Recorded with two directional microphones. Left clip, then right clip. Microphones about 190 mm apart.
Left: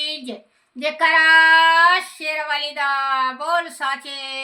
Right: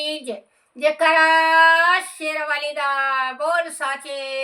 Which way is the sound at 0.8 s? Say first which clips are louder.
Even; 25° right (ahead or behind).